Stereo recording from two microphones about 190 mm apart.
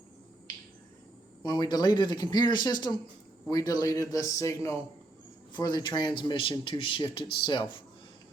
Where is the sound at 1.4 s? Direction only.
25° left (ahead or behind).